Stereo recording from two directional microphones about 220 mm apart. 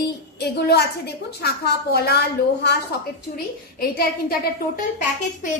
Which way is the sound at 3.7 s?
45° left (ahead or behind).